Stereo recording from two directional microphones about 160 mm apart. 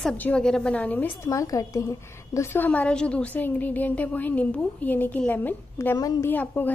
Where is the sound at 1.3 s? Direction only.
20° left (ahead or behind).